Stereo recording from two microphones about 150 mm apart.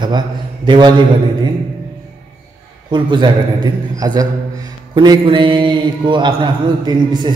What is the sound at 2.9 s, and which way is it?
A man's voice, 30° right (ahead or behind).